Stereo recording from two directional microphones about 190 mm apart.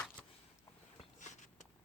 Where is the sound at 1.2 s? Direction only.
40° left (ahead or behind).